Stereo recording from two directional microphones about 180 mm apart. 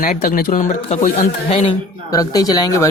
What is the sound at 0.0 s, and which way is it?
Speech, 45° left (ahead or behind).